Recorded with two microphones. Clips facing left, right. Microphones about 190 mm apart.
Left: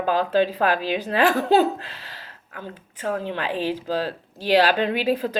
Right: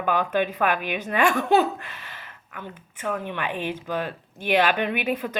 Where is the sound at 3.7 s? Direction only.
35° left (ahead or behind).